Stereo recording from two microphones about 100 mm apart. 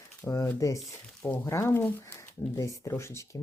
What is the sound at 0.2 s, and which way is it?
Speech, 30° left (ahead or behind).